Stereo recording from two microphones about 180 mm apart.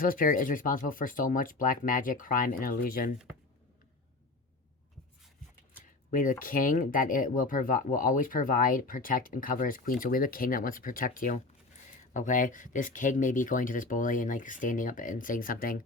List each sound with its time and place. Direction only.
0.0 s speech: 50° left (ahead or behind)
6.1 s speech: 50° left (ahead or behind)